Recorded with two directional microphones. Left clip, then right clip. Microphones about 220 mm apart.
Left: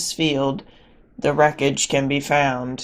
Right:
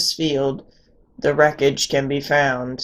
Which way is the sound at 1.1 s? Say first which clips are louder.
Right 1 dB; 20° left (ahead or behind).